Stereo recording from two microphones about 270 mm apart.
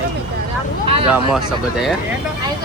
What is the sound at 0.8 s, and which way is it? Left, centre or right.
Speech, right.